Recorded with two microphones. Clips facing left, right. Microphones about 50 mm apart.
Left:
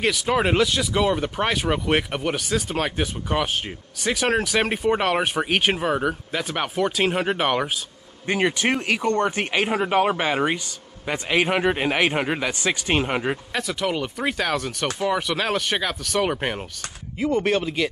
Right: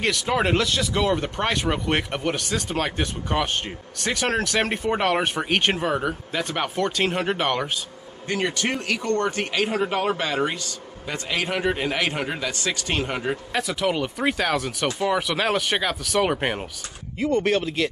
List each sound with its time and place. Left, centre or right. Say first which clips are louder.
0.0 s speech: left 1 dB; centre
8.3 s speech: left 3 dB; left
13.5 s speech: right 1 dB; centre